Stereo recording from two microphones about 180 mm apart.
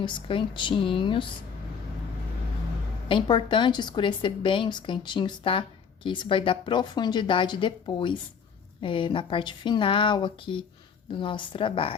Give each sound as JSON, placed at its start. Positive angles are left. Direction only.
{"t": 0.0, "sound": "a woman's voice", "side_deg": 30}
{"t": 3.1, "sound": "a woman's voice", "side_deg": 25}